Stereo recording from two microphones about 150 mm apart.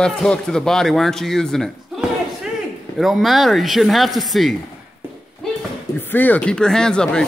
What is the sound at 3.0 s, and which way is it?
A man's voice, centre (ahead or behind).